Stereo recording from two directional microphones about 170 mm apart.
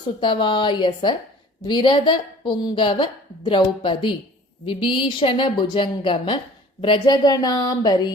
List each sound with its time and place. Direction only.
0.2 s a woman's voice: 30° left (ahead or behind)